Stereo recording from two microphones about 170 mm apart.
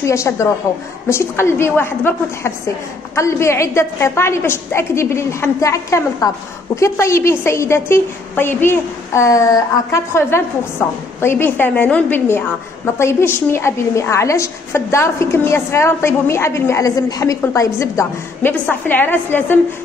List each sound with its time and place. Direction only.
0.0 s a woman's voice: 15° left (ahead or behind)